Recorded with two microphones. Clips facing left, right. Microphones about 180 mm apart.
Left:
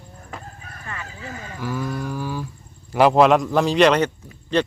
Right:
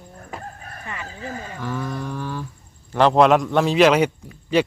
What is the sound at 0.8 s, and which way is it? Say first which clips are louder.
Speech: right 1 dB; 20° right (ahead or behind).